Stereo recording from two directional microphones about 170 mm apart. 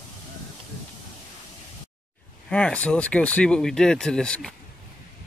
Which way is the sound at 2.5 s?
5° left (ahead or behind).